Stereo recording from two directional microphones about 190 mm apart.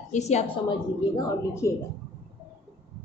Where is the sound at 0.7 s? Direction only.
20° left (ahead or behind).